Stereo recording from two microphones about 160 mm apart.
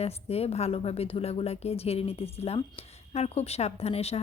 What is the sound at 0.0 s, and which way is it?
A woman's voice, 40° left (ahead or behind).